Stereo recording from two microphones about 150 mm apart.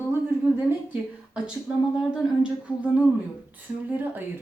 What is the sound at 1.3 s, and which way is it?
Speech, 5° right (ahead or behind).